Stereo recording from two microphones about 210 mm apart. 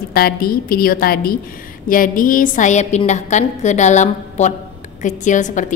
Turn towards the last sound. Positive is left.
turn(degrees=35)  # may be behind; listen again after turning